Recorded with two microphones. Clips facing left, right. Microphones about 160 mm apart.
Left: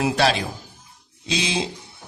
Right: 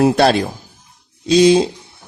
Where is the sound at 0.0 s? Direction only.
50° right (ahead or behind).